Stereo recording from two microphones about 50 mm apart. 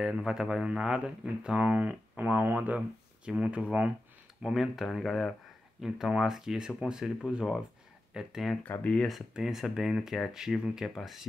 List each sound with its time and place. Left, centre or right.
0.0 s speech: centre; by 3.9 s right
4.4 s speech: centre
8.7 s speech: left
9.3 s speech: centre